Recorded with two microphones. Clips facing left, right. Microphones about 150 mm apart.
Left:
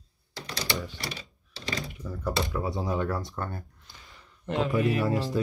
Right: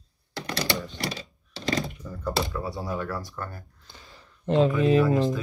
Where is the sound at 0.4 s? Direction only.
65° right (ahead or behind).